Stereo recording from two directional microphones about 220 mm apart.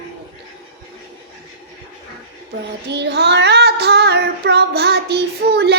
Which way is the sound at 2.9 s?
50° right (ahead or behind).